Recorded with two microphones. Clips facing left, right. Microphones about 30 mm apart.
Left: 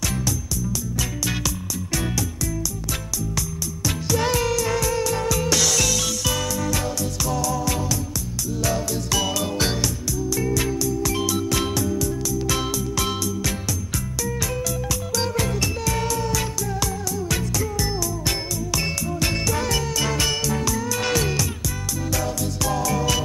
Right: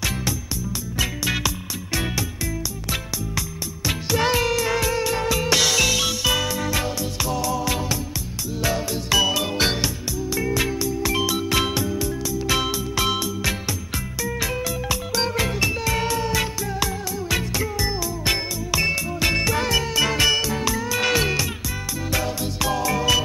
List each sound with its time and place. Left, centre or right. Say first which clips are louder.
3.3 s music: even; right